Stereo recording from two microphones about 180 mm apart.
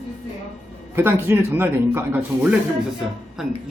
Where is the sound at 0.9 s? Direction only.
10° right (ahead or behind).